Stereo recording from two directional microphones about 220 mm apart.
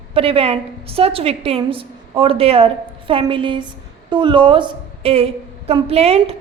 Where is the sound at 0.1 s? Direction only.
25° right (ahead or behind).